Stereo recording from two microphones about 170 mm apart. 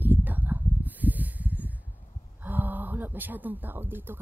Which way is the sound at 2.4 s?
10° right (ahead or behind).